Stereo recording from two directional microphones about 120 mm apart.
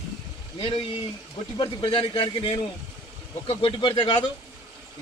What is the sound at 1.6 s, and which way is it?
A man's voice, 40° left (ahead or behind).